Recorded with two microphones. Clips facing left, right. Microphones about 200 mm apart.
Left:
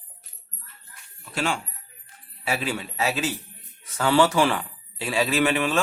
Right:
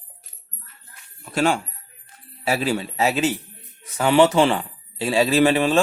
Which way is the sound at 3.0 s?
25° right (ahead or behind).